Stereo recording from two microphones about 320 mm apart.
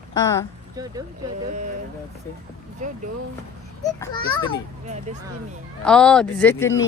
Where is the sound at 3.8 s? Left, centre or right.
Centre.